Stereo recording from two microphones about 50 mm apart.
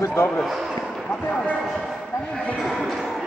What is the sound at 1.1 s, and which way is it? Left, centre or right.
Speech, left.